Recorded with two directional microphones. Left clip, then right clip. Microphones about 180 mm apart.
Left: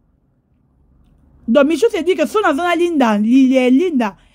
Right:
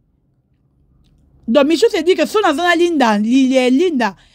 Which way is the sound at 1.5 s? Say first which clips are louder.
Right 1 dB; 25° right (ahead or behind).